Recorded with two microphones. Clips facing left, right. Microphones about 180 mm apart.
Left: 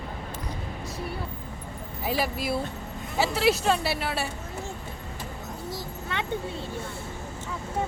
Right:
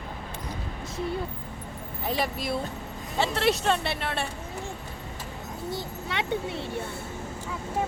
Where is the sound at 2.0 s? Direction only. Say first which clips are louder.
Left 1 dB; 5° left (ahead or behind).